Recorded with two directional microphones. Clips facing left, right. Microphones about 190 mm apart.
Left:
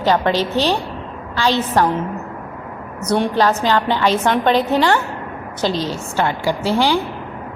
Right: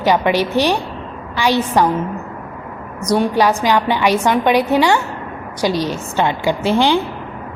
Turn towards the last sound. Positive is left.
turn(degrees=-20)  # may be behind; listen again after turning